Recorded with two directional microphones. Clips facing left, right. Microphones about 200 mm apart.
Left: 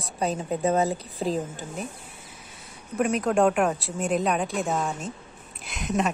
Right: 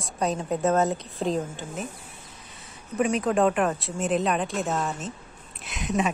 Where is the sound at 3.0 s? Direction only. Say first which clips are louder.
Even; centre (ahead or behind).